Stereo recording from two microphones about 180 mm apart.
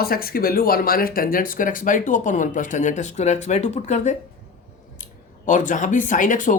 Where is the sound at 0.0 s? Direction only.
55° left (ahead or behind); by 4.2 s 40° left (ahead or behind).